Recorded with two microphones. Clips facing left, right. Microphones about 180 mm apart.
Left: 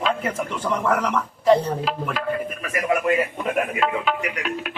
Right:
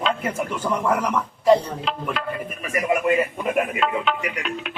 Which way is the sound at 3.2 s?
Centre (ahead or behind).